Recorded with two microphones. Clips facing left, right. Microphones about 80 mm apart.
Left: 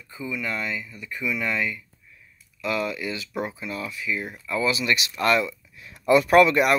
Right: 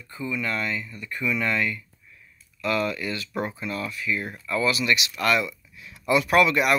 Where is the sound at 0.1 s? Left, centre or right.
Centre.